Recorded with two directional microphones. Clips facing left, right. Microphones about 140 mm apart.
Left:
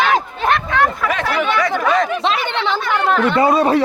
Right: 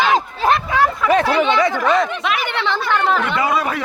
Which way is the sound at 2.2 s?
20° left (ahead or behind).